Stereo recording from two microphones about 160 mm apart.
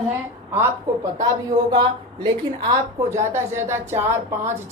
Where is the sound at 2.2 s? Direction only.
25° right (ahead or behind).